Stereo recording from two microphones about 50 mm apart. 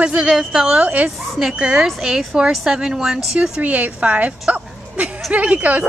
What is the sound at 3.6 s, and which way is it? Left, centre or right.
A woman's voice, right.